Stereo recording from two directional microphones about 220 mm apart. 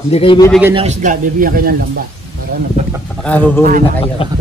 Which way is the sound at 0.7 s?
35° right (ahead or behind).